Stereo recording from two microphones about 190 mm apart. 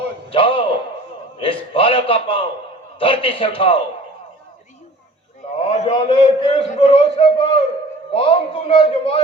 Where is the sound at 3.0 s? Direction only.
30° left (ahead or behind).